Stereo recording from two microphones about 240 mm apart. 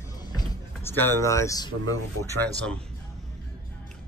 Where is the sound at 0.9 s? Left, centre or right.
Centre.